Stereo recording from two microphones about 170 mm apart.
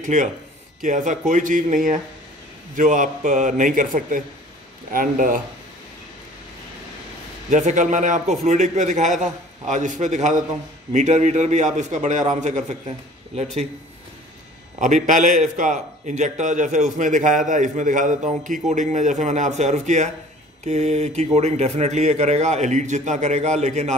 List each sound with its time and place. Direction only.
0.0 s a man's voice: 45° right (ahead or behind)
7.4 s a man's voice: 45° right (ahead or behind)
15.0 s a man's voice: 50° right (ahead or behind)